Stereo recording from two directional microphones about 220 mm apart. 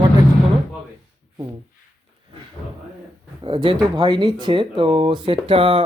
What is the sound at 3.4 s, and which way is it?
Speech, 20° right (ahead or behind).